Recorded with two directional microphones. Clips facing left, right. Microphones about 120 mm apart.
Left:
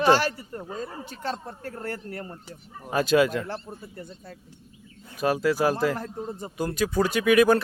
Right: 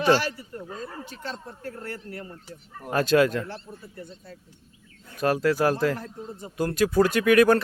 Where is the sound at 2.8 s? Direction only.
5° left (ahead or behind).